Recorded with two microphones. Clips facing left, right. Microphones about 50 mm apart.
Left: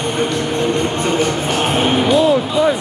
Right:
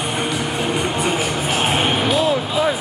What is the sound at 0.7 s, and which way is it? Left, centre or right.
Music, centre.